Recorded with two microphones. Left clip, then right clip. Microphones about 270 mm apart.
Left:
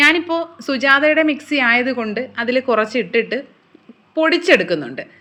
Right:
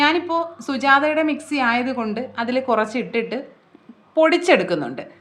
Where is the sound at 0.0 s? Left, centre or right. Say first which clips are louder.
Left 4 dB; centre.